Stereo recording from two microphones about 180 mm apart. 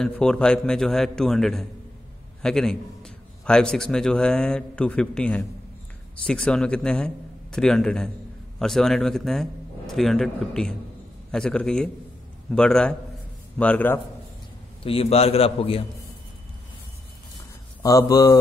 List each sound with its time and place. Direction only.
0.0 s a man's voice: 5° left (ahead or behind)
14.8 s a man's voice: 30° left (ahead or behind)
17.8 s speech: 20° left (ahead or behind)